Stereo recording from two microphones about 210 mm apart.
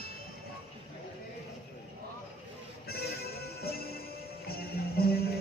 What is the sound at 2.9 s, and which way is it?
Music, 50° left (ahead or behind).